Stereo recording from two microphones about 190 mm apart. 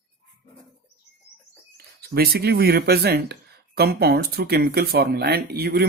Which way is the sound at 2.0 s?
55° right (ahead or behind).